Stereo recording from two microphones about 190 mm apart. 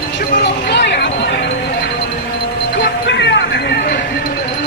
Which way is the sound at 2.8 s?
65° left (ahead or behind).